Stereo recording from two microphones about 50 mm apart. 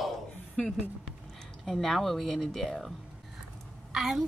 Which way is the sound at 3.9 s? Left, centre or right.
Centre.